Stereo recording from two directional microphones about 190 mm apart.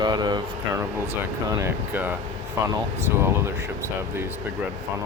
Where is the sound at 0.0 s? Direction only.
20° right (ahead or behind).